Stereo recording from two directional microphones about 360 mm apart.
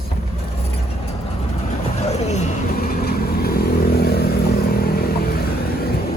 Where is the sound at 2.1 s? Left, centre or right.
Centre.